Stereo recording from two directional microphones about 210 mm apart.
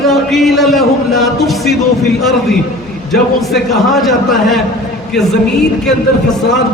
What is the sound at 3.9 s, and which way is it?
A man's voice, centre (ahead or behind).